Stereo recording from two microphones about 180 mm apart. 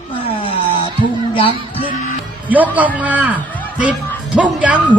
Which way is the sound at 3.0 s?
10° right (ahead or behind).